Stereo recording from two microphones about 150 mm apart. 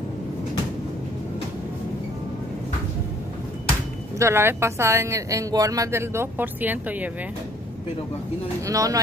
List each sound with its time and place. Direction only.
4.2 s speech: 15° right (ahead or behind)
8.6 s speech: 20° right (ahead or behind)